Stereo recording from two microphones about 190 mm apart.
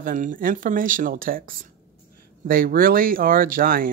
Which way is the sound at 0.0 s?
45° right (ahead or behind).